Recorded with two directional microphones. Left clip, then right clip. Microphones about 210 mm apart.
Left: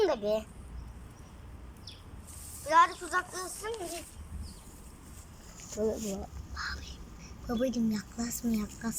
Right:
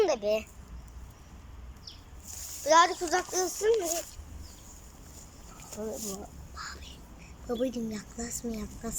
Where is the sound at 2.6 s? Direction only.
25° right (ahead or behind).